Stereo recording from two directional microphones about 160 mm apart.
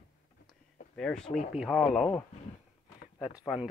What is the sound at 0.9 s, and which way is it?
Speech, 5° left (ahead or behind).